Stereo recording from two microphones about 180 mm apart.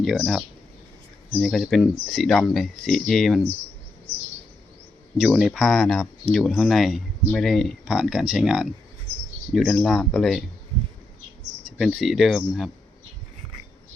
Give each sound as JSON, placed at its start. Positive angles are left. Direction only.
{"t": 0.0, "sound": "speech", "side_deg": 0}
{"t": 5.1, "sound": "speech", "side_deg": 0}
{"t": 11.8, "sound": "speech", "side_deg": 0}